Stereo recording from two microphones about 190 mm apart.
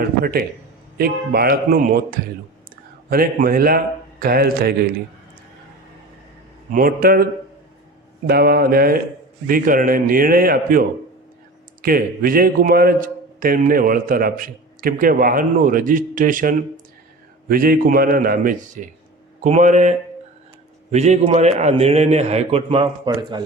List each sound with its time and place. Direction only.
0.2 s a man's voice: 55° right (ahead or behind)
6.7 s a man's voice: 45° right (ahead or behind)
8.3 s a man's voice: 50° right (ahead or behind); by 23.4 s 25° right (ahead or behind)